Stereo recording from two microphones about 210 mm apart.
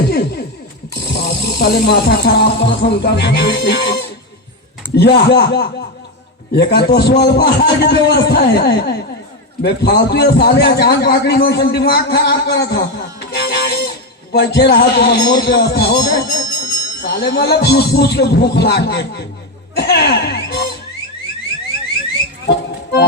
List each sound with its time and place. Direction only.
0.1 s a sound: 50° left (ahead or behind)
1.0 s speech: 50° left (ahead or behind)
4.9 s a man's voice: 50° left (ahead or behind)
22.4 s music: 50° left (ahead or behind)